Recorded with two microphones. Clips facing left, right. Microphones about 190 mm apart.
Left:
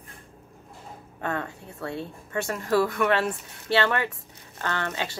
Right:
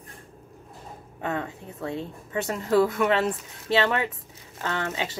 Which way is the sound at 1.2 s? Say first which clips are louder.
Right 1 dB; 15° right (ahead or behind).